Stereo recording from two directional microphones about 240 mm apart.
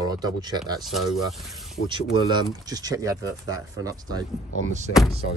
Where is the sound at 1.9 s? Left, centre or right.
Centre.